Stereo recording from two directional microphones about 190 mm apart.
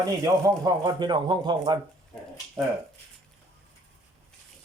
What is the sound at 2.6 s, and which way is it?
Speech, 10° right (ahead or behind).